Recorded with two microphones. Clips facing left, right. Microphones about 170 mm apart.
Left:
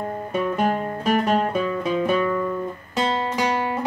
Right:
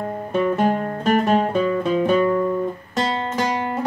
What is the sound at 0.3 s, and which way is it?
Music, 5° left (ahead or behind).